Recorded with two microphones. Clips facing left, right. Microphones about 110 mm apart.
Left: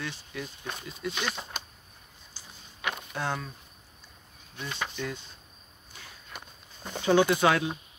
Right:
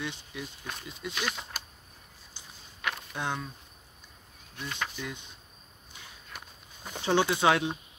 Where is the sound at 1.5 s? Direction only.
5° right (ahead or behind).